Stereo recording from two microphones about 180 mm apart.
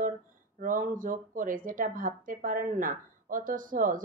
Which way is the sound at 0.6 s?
50° right (ahead or behind).